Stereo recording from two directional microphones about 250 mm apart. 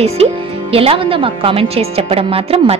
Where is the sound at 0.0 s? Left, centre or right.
Right.